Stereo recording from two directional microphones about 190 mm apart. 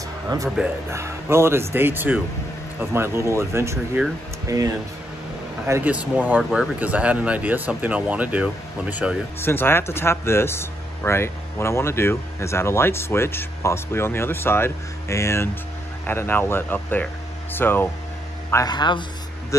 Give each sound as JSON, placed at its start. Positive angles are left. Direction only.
{"t": 0.6, "sound": "speech", "side_deg": -15}
{"t": 9.4, "sound": "speech", "side_deg": 10}